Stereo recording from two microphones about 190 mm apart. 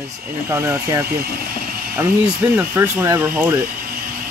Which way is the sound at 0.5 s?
15° right (ahead or behind).